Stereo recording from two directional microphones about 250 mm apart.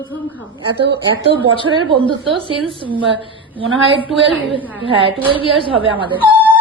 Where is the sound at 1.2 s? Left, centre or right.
Right.